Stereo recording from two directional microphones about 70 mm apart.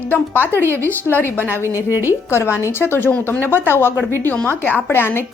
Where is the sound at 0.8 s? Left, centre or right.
Left.